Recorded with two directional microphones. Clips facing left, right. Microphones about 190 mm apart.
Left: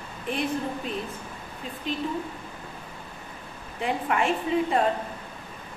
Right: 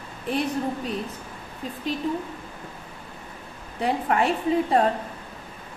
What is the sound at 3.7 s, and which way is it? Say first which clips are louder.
A woman's voice: right 3 dB; 40° right (ahead or behind).